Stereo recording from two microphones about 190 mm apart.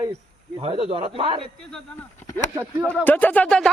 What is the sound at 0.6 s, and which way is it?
Speech, 30° right (ahead or behind).